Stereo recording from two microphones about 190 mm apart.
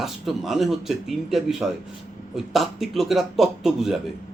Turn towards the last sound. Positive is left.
turn(degrees=0)  # may be behind; listen again after turning